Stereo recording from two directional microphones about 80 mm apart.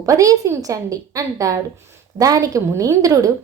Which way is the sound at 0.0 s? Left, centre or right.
Right.